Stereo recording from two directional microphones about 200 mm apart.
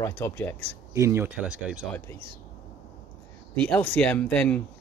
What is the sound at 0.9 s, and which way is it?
Speech, 10° right (ahead or behind).